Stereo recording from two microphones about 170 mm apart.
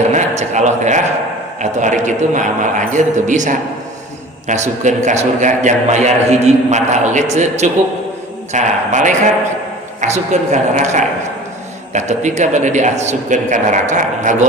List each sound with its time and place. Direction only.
0.1 s a man's voice: 45° right (ahead or behind)